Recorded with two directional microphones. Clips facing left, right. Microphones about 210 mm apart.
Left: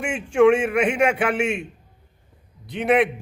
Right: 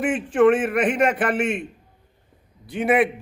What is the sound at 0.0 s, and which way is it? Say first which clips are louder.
A man's voice: even; 5° right (ahead or behind).